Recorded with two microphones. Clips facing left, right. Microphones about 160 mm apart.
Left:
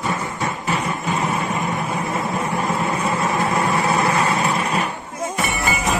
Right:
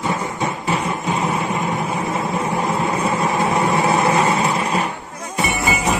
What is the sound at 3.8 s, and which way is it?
Vehicle, 20° right (ahead or behind).